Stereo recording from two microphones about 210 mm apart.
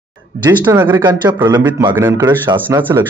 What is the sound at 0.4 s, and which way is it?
Speech, 15° right (ahead or behind).